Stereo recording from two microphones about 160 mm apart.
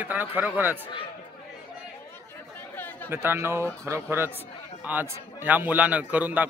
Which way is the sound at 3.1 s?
15° right (ahead or behind).